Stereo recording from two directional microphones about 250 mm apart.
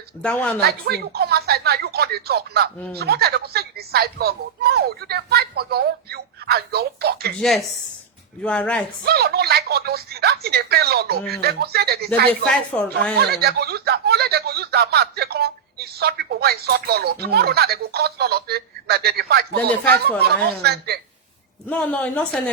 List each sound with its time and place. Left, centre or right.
0.2 s speech: centre
0.6 s speech: right
8.4 s speech: centre
9.0 s speech: right
12.5 s speech: centre
13.3 s speech: right
21.7 s speech: centre